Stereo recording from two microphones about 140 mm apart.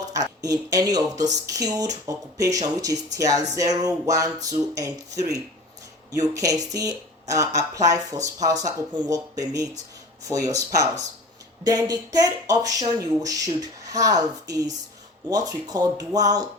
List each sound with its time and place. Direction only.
0.1 s speech: 25° right (ahead or behind)